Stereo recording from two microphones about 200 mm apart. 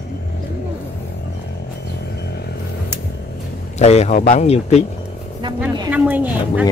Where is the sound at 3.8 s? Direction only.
35° left (ahead or behind).